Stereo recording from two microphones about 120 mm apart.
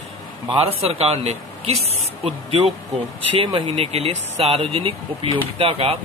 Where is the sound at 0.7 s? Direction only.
55° right (ahead or behind).